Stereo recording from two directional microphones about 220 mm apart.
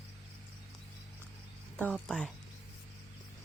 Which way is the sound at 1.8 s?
5° left (ahead or behind).